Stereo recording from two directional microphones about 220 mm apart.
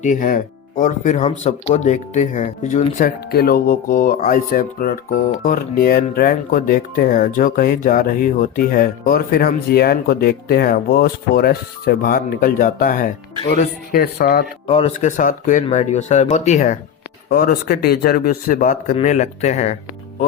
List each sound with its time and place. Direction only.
0.0 s speech: 35° left (ahead or behind)
14.7 s speech: 30° left (ahead or behind)
17.2 s speech: 45° left (ahead or behind)